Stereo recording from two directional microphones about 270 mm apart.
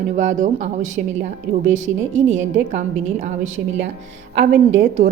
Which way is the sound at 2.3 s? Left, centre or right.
Right.